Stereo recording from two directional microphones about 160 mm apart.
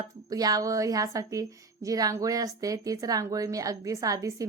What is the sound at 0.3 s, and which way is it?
A woman's voice, 20° right (ahead or behind).